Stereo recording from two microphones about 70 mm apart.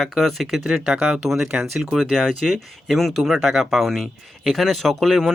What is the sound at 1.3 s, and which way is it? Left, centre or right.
Speech, centre.